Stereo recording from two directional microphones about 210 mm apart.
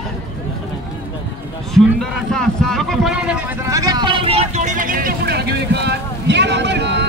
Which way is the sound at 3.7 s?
15° right (ahead or behind).